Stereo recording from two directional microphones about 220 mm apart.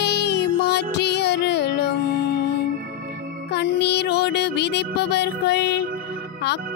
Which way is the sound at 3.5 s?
50° left (ahead or behind).